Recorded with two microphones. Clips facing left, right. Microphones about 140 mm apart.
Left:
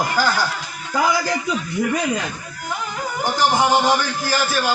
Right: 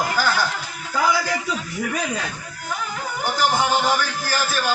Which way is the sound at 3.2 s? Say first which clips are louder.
Left 3 dB; 15° left (ahead or behind).